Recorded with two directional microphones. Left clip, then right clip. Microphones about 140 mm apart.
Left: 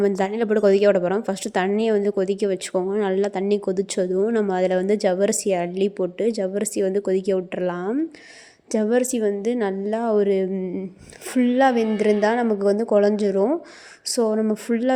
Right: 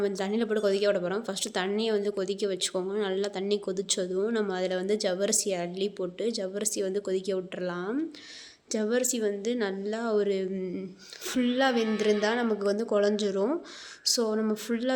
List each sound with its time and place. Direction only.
0.0 s a woman's voice: 60° left (ahead or behind); by 14.9 s 45° left (ahead or behind)